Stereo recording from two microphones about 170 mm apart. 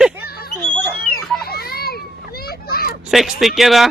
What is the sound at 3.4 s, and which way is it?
Speech, centre (ahead or behind).